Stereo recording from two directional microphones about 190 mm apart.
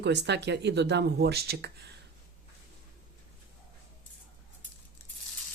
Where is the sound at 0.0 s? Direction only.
65° right (ahead or behind).